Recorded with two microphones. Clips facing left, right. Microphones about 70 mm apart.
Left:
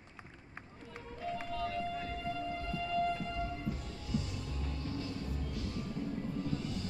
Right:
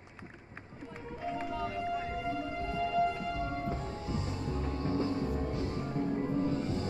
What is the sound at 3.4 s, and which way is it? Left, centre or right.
Music, right.